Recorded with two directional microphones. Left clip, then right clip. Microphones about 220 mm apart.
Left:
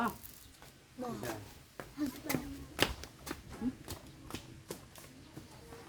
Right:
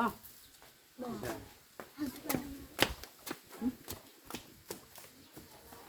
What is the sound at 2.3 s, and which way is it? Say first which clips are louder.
Speech: right 1 dB; 5° left (ahead or behind).